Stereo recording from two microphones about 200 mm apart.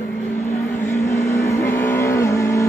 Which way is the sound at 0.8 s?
15° left (ahead or behind).